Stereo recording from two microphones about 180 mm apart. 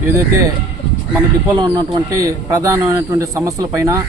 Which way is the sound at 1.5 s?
20° right (ahead or behind).